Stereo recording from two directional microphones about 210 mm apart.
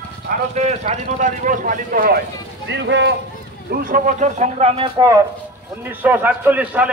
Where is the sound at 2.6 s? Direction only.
60° right (ahead or behind).